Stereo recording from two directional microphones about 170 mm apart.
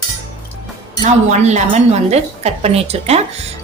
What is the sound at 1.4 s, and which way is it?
A woman's voice, 40° right (ahead or behind).